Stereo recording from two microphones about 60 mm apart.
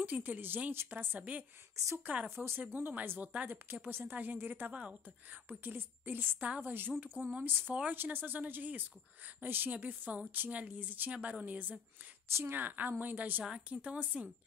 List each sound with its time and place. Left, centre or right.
0.0 s speech: right
2.2 s a woman's voice: right
6.4 s a woman's voice: right
12.3 s speech: right
12.5 s a woman's voice: right